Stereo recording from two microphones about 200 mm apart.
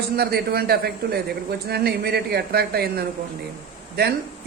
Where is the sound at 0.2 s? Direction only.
50° right (ahead or behind).